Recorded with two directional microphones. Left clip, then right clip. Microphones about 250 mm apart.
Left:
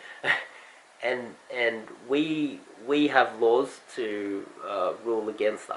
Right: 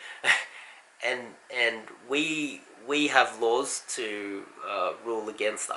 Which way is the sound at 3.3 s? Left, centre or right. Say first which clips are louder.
Left 3 dB; left.